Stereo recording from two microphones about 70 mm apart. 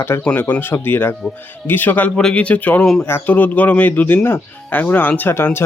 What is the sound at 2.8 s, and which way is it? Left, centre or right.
Speech, centre.